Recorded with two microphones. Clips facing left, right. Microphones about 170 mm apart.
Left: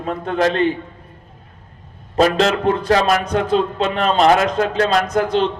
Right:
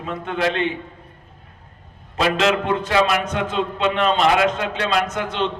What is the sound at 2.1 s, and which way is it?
A man's voice, 40° left (ahead or behind).